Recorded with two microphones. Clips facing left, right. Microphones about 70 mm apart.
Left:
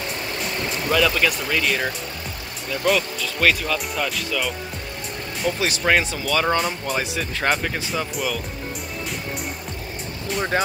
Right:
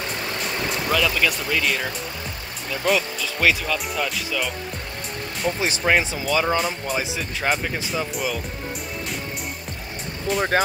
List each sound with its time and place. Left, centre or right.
0.9 s speech: centre
5.4 s speech: centre
10.3 s speech: centre